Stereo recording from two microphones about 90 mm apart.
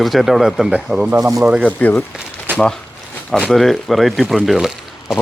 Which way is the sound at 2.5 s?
20° right (ahead or behind).